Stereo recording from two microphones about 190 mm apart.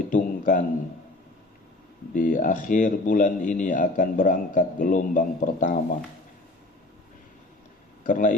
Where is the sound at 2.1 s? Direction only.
45° left (ahead or behind).